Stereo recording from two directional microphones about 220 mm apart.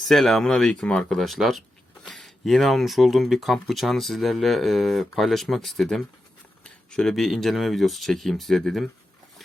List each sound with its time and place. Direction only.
0.0 s speech: centre (ahead or behind)